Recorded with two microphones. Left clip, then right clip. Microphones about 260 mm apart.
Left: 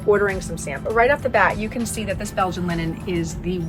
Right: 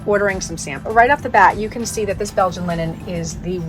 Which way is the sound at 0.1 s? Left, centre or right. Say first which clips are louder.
Right 1 dB; right.